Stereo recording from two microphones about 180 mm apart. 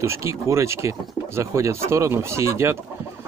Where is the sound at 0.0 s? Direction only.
15° right (ahead or behind).